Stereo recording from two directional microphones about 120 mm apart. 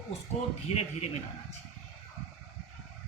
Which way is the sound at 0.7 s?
60° left (ahead or behind).